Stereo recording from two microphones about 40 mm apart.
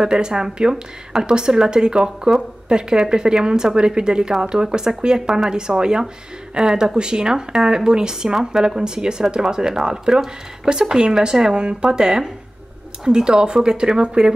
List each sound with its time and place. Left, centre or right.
0.0 s speech: centre